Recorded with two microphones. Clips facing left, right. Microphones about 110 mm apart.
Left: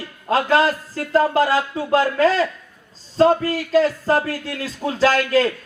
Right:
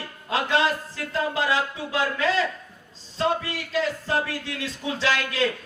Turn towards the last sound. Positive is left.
turn(degrees=40)  # may be behind; listen again after turning